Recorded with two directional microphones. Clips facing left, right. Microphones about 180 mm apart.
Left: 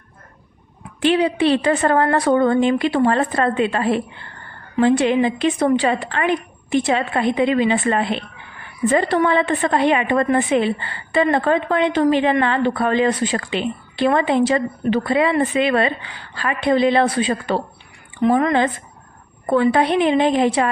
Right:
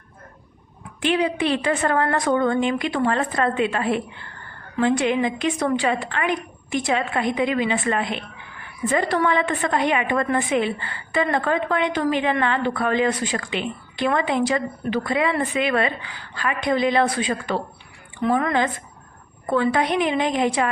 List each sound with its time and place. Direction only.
1.0 s a woman's voice: 30° left (ahead or behind)
19.7 s a woman's voice: 30° left (ahead or behind)